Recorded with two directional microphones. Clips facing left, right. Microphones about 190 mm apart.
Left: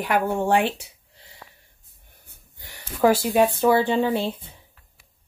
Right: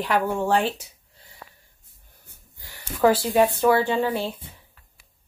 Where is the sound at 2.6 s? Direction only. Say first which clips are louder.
Even; 15° left (ahead or behind).